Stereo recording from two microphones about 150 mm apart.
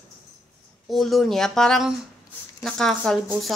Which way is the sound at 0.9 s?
Centre (ahead or behind).